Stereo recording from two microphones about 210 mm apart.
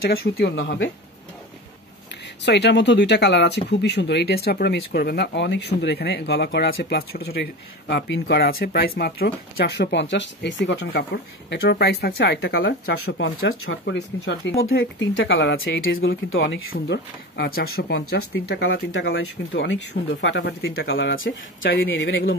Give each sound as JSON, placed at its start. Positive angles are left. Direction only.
{"t": 0.1, "sound": "speech", "side_deg": 50}
{"t": 2.4, "sound": "speech", "side_deg": 55}
{"t": 13.0, "sound": "speech", "side_deg": 70}
{"t": 15.1, "sound": "speech", "side_deg": 60}
{"t": 16.3, "sound": "speech", "side_deg": 65}